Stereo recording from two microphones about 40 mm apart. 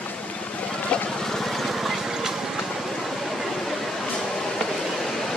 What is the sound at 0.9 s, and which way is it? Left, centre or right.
Vehicle, left.